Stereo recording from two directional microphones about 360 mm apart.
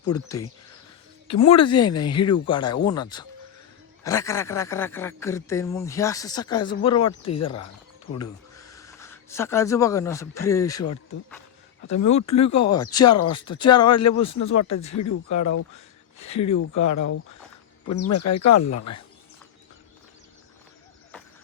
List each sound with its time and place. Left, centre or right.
0.1 s speech: centre
1.5 s speech: centre
8.7 s speech: centre
11.9 s speech: left
12.1 s speech: centre
14.0 s speech: left